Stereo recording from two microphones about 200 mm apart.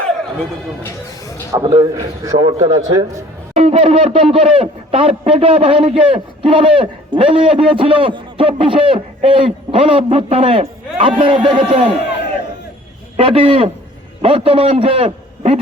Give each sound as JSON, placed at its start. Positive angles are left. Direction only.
{"t": 1.5, "sound": "a man's voice", "side_deg": -20}
{"t": 13.1, "sound": "a man's voice", "side_deg": -25}